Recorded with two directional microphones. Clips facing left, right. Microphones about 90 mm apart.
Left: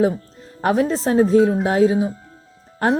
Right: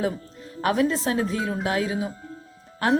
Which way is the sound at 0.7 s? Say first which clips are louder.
Left 5 dB; 35° left (ahead or behind).